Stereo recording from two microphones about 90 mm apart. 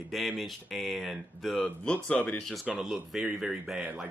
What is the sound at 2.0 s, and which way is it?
Speech, 15° left (ahead or behind).